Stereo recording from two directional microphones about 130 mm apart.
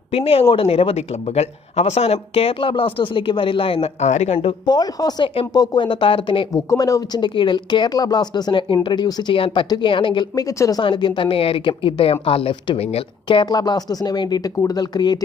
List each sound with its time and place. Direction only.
0.1 s speech: 50° left (ahead or behind)
4.7 s a woman's voice: 30° left (ahead or behind)
6.5 s a woman's voice: 25° left (ahead or behind)
10.8 s a woman's voice: 40° left (ahead or behind)